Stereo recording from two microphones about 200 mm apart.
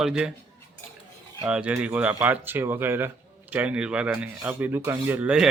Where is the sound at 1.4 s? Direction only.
5° right (ahead or behind).